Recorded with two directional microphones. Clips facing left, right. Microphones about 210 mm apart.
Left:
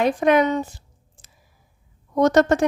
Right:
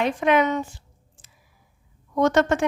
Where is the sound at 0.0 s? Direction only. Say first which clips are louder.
Left 3 dB; 40° left (ahead or behind).